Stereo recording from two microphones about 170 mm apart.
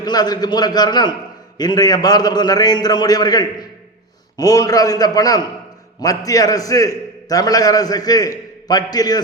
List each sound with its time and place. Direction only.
0.0 s a man's voice: 25° left (ahead or behind)